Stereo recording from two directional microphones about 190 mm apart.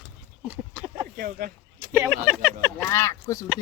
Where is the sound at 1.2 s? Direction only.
50° right (ahead or behind).